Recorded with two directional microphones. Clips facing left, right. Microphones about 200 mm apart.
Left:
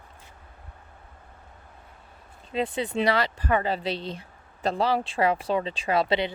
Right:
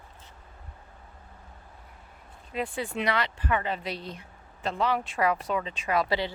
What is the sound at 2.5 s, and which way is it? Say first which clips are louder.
Speech: left 4 dB; 25° left (ahead or behind).